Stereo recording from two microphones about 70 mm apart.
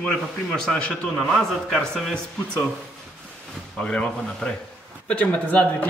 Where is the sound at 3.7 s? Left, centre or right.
Centre.